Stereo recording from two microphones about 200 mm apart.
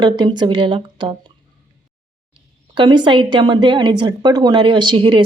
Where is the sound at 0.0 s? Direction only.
20° right (ahead or behind).